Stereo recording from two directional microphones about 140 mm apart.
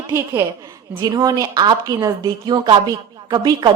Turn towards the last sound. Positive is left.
turn(degrees=-30)  # may be behind; listen again after turning